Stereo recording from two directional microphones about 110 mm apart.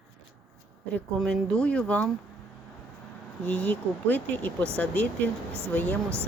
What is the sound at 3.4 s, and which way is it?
Speech, 10° left (ahead or behind).